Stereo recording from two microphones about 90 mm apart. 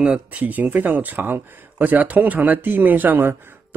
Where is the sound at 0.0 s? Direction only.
15° right (ahead or behind).